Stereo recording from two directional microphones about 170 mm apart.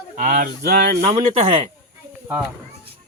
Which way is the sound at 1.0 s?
35° right (ahead or behind).